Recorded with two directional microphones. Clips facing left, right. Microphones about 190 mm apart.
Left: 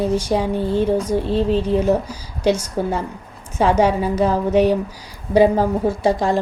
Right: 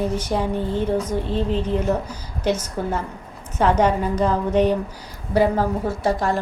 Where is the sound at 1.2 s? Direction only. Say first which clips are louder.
Left 5 dB; 15° right (ahead or behind).